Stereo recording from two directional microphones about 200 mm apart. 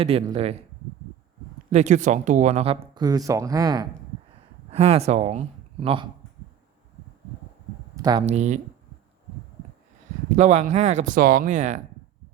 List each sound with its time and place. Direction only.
0.0 s speech: 30° right (ahead or behind)
1.7 s speech: 35° right (ahead or behind); by 3.8 s 20° right (ahead or behind)
4.7 s speech: 30° right (ahead or behind)
7.9 s speech: 20° right (ahead or behind)
8.3 s speech: 35° right (ahead or behind)
10.3 s speech: 35° right (ahead or behind)